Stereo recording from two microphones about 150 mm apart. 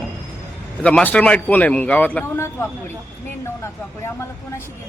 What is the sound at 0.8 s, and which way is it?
A man's voice, 10° left (ahead or behind).